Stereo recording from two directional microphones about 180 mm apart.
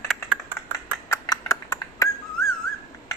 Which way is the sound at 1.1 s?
20° left (ahead or behind).